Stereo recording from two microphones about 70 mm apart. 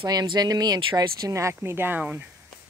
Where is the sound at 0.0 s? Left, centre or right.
Right.